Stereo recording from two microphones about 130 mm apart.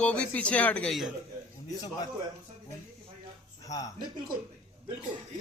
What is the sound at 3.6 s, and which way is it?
Speech, 25° left (ahead or behind).